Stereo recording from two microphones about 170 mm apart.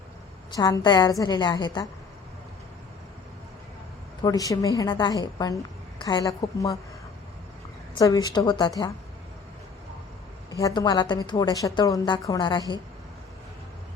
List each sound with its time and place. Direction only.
0.5 s a woman's voice: 25° left (ahead or behind)
4.2 s a woman's voice: 20° left (ahead or behind)
7.9 s a woman's voice: 20° left (ahead or behind)
10.6 s a woman's voice: 20° left (ahead or behind)